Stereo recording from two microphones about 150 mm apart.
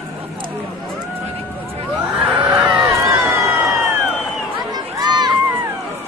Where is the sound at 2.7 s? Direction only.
20° right (ahead or behind).